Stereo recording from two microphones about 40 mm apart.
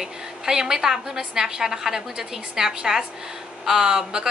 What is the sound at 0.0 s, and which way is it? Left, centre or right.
A woman's voice, centre.